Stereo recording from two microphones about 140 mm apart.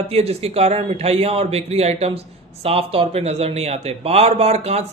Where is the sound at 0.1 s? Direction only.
45° right (ahead or behind).